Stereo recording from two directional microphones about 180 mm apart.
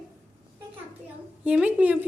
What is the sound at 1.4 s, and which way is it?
Speech, 5° right (ahead or behind).